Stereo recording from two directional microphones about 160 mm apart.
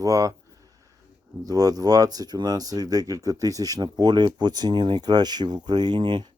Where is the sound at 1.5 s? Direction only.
25° right (ahead or behind).